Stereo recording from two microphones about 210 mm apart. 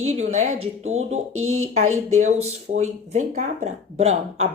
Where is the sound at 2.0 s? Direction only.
35° right (ahead or behind).